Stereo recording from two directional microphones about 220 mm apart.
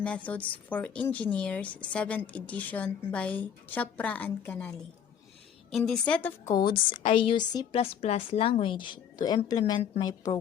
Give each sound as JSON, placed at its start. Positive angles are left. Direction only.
{"t": 0.0, "sound": "speech", "side_deg": 5}
{"t": 5.7, "sound": "a woman's voice", "side_deg": 0}
{"t": 6.5, "sound": "a woman's voice", "side_deg": 20}